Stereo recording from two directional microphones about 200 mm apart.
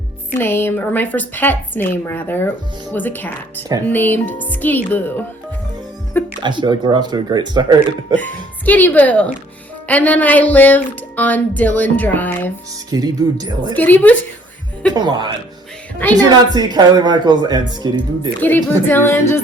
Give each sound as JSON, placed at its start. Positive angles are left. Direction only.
{"t": 0.3, "sound": "speech", "side_deg": 10}
{"t": 6.4, "sound": "speech", "side_deg": -20}
{"t": 8.1, "sound": "speech", "side_deg": 10}
{"t": 12.9, "sound": "speech", "side_deg": -20}
{"t": 13.7, "sound": "speech", "side_deg": 10}
{"t": 14.9, "sound": "speech", "side_deg": -20}
{"t": 16.6, "sound": "speech", "side_deg": -20}
{"t": 18.3, "sound": "speech", "side_deg": 10}